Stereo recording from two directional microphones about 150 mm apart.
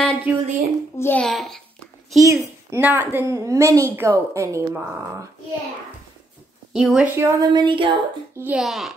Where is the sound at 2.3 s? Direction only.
15° right (ahead or behind).